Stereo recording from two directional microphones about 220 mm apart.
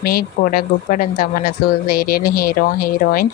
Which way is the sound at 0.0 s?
45° left (ahead or behind).